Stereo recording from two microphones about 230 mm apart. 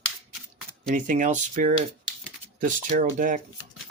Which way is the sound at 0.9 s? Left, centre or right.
Right.